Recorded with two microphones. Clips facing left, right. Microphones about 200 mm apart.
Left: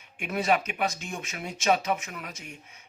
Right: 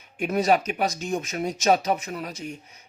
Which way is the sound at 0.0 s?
40° right (ahead or behind).